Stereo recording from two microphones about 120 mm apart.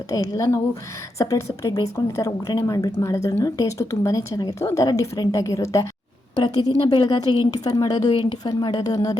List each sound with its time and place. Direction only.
0.1 s a woman's voice: 30° left (ahead or behind)
6.4 s a woman's voice: 35° left (ahead or behind)